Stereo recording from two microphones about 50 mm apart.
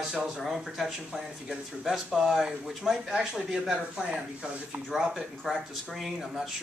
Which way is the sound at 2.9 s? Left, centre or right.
Centre.